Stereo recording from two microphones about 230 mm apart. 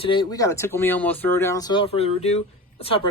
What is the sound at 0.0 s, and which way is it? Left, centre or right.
Speech, left.